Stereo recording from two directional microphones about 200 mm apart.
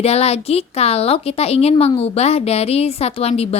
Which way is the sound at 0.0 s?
30° left (ahead or behind).